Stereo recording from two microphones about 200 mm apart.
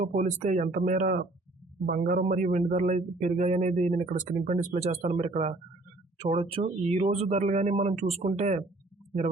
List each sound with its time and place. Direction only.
0.0 s a man's voice: 40° right (ahead or behind)